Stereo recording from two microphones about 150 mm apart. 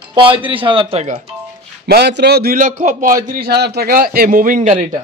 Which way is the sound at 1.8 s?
90° right.